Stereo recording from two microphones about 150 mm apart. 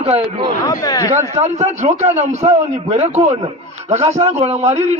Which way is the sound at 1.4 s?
45° right (ahead or behind).